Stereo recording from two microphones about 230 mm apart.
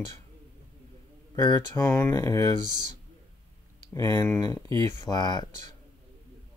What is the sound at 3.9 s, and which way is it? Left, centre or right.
Speech, centre.